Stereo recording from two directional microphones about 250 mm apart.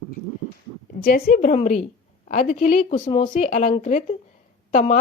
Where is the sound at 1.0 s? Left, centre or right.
Left.